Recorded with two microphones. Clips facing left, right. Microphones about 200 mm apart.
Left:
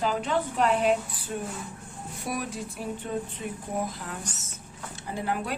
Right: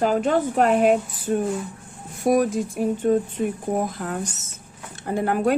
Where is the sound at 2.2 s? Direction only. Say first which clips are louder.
Right 14 dB; 45° right (ahead or behind).